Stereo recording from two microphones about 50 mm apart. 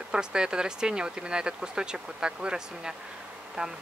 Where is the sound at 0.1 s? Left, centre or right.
Centre.